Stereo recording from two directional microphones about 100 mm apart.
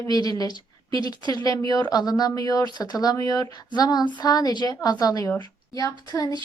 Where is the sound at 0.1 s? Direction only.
40° left (ahead or behind).